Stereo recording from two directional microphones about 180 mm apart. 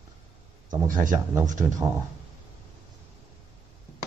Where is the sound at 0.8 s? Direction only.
50° right (ahead or behind).